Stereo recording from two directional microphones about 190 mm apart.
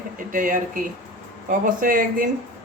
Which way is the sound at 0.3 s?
45° right (ahead or behind).